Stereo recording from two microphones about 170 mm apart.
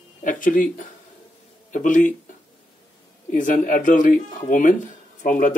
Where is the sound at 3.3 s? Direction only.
50° left (ahead or behind).